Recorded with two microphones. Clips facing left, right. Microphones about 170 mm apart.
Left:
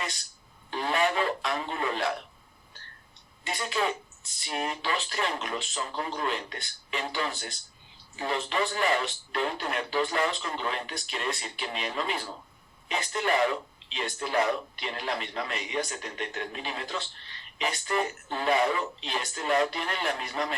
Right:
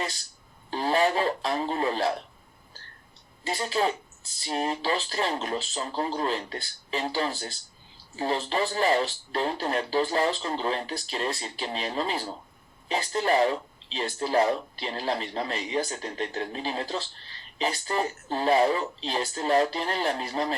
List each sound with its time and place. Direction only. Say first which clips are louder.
0.7 s radio: right 3 dB; 35° right (ahead or behind)
3.4 s speech: right 3 dB; 35° right (ahead or behind)